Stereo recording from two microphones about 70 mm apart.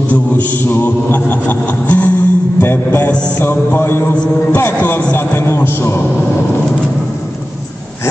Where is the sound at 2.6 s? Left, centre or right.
Left.